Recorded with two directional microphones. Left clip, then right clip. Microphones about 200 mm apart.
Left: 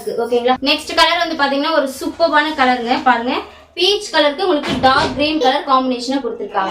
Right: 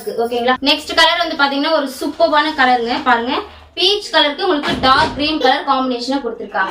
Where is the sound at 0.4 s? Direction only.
15° left (ahead or behind).